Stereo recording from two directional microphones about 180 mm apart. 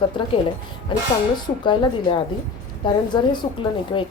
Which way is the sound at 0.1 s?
25° left (ahead or behind).